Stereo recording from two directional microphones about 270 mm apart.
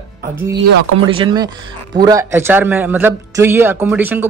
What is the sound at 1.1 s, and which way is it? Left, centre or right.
A man's voice, centre.